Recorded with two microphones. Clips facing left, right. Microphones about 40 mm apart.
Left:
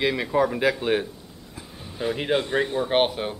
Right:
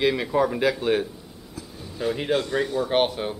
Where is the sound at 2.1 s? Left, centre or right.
Centre.